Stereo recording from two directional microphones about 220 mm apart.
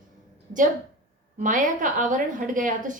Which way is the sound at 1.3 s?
35° right (ahead or behind).